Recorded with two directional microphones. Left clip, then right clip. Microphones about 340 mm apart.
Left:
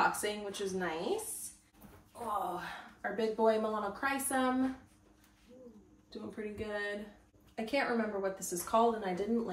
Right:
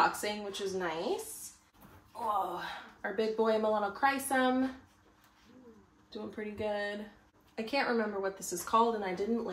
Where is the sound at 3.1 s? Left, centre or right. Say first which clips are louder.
Even; centre.